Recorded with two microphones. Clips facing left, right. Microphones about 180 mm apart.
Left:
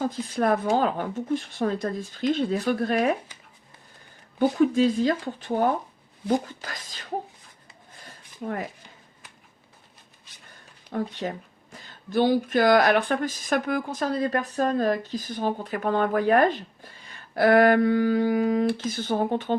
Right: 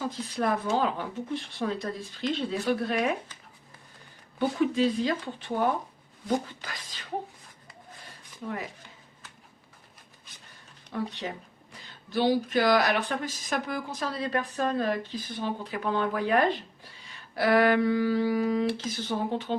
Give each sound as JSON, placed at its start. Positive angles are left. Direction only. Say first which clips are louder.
{"t": 0.0, "sound": "speech", "louder": "left 4 dB", "side_deg": 50}
{"t": 4.4, "sound": "speech", "louder": "left 5 dB", "side_deg": 45}
{"t": 10.9, "sound": "speech", "louder": "left 4 dB", "side_deg": 45}